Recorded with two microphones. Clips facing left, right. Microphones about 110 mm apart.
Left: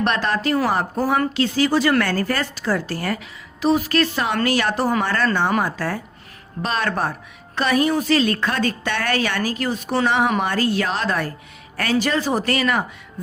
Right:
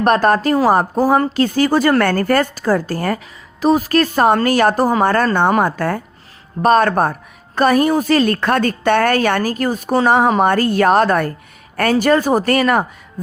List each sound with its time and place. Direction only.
0.0 s a woman's voice: 45° right (ahead or behind)